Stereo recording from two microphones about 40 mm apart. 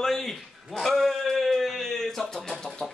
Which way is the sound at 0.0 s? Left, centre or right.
Centre.